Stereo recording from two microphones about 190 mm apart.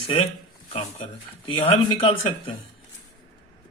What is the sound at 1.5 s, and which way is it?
Speech, 30° left (ahead or behind).